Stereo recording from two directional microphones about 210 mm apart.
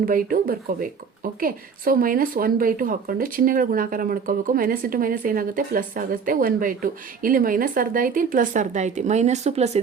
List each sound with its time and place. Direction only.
0.0 s speech: 40° right (ahead or behind)